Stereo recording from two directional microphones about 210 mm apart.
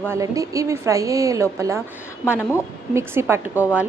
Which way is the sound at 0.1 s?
15° right (ahead or behind).